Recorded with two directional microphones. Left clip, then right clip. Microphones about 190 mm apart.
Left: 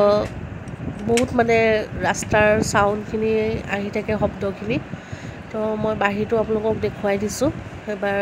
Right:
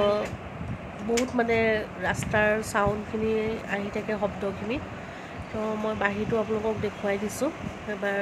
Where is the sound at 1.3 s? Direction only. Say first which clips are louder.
Left 7 dB; 30° left (ahead or behind).